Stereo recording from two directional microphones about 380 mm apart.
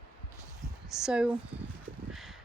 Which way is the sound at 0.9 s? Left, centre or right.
Centre.